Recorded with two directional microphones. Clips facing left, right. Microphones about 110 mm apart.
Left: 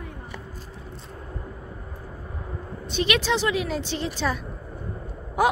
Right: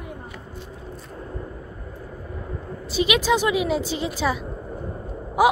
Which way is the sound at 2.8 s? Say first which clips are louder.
Right 3 dB; 5° right (ahead or behind).